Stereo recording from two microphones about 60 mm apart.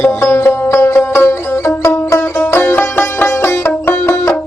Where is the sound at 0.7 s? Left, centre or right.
Left.